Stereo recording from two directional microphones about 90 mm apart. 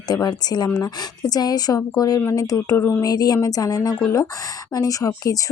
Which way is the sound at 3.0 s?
45° left (ahead or behind).